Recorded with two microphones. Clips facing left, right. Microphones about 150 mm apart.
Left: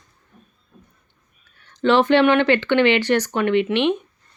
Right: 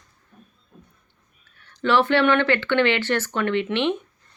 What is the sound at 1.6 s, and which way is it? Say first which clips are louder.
Speech: left 3 dB; 20° left (ahead or behind).